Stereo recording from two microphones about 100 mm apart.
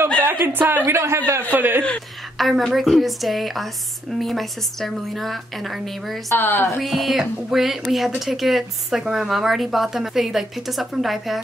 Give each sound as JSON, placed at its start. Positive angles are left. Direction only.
{"t": 0.2, "sound": "speech", "side_deg": -20}
{"t": 2.3, "sound": "a woman's voice", "side_deg": 0}
{"t": 6.2, "sound": "speech", "side_deg": 20}
{"t": 6.8, "sound": "a woman's voice", "side_deg": 0}